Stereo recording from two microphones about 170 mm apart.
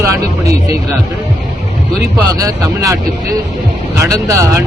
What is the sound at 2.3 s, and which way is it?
Speech, 20° right (ahead or behind).